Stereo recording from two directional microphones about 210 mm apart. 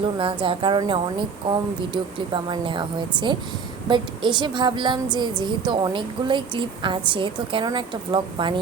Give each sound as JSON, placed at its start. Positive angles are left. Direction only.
{"t": 0.2, "sound": "a woman's voice", "side_deg": -25}